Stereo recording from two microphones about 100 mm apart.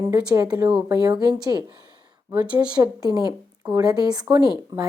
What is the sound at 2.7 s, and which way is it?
A woman's voice, 45° right (ahead or behind).